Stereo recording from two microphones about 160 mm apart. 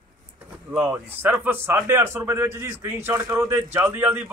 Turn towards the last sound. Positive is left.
turn(degrees=-10)  # may be behind; listen again after turning